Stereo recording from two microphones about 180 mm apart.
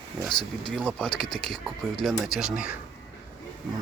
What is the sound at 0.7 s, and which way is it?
Speech, 5° left (ahead or behind).